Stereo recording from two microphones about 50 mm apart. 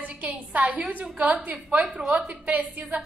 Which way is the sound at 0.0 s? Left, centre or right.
Right.